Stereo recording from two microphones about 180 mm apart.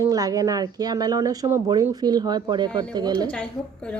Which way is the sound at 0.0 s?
20° right (ahead or behind).